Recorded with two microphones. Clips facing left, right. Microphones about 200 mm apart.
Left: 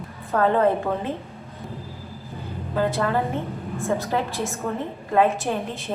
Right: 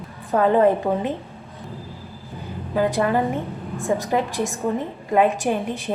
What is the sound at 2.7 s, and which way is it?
A woman's voice, 15° right (ahead or behind).